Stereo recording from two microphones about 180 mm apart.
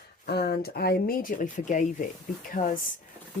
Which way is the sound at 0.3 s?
60° left (ahead or behind).